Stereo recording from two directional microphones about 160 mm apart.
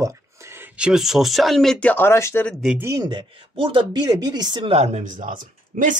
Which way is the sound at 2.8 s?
20° right (ahead or behind).